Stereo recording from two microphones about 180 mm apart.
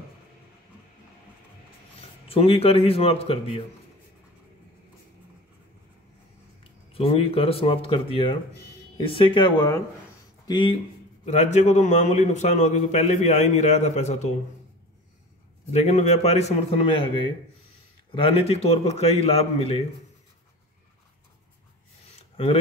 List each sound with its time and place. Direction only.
2.0 s a man's voice: 30° left (ahead or behind)
6.6 s speech: 30° left (ahead or behind)
11.2 s speech: 40° left (ahead or behind)
15.7 s speech: 40° left (ahead or behind)